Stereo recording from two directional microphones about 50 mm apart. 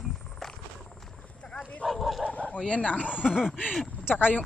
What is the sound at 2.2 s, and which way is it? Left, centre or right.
Speech, left.